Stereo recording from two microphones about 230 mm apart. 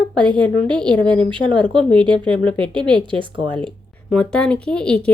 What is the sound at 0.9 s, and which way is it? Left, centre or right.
Speech, right.